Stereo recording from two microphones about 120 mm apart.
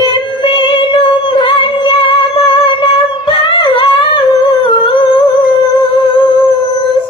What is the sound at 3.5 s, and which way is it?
Music, 45° left (ahead or behind).